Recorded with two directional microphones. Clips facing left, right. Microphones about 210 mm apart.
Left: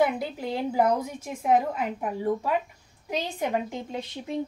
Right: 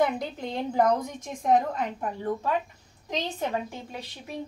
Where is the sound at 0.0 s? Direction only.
5° left (ahead or behind).